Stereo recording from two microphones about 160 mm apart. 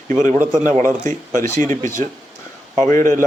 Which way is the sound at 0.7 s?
55° right (ahead or behind).